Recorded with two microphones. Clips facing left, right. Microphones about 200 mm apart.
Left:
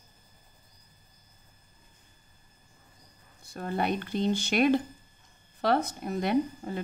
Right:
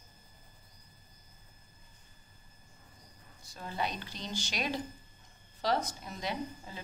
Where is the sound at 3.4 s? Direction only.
55° left (ahead or behind).